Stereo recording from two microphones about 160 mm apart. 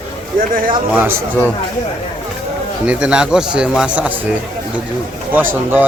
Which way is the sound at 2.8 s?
5° right (ahead or behind).